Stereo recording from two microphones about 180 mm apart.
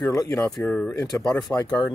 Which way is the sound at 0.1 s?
20° left (ahead or behind).